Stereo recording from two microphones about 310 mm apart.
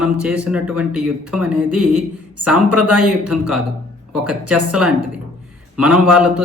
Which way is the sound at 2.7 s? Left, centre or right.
Right.